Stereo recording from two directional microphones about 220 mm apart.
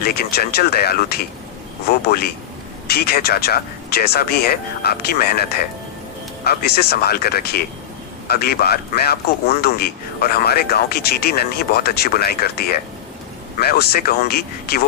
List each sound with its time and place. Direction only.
0.0 s a man's voice: 45° left (ahead or behind)